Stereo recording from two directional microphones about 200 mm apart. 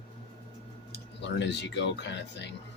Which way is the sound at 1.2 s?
65° left (ahead or behind).